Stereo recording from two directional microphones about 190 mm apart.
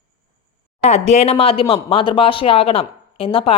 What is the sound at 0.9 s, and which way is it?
A woman's voice, 35° left (ahead or behind).